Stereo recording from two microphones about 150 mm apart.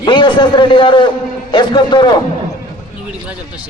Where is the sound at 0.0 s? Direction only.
30° left (ahead or behind).